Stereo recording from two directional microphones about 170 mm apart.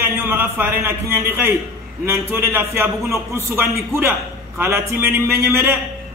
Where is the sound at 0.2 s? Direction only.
10° right (ahead or behind).